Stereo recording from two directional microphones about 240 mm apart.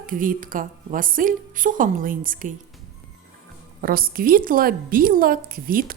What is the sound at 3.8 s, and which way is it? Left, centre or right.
A woman's voice, right.